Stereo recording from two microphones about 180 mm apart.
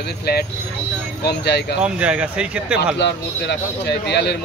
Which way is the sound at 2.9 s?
70° left (ahead or behind).